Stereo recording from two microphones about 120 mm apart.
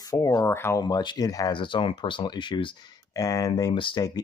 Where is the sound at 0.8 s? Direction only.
40° left (ahead or behind).